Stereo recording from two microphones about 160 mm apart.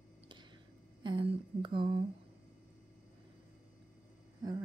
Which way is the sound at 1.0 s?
30° right (ahead or behind).